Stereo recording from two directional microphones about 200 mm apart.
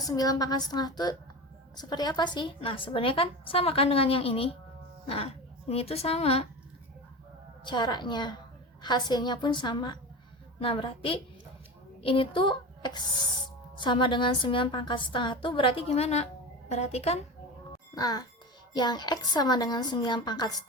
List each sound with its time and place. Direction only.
0.0 s a woman's voice: 20° left (ahead or behind)
7.6 s a woman's voice: 20° left (ahead or behind)
17.9 s a woman's voice: 20° left (ahead or behind)